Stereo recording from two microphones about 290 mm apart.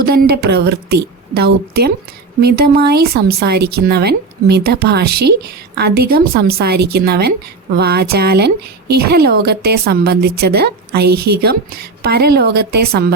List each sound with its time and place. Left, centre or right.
0.0 s a woman's voice: right